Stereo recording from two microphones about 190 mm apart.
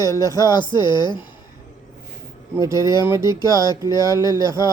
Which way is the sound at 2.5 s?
15° right (ahead or behind).